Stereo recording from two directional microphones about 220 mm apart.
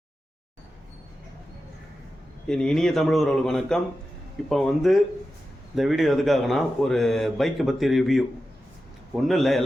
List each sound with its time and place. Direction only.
2.5 s speech: 5° left (ahead or behind)
9.2 s speech: centre (ahead or behind)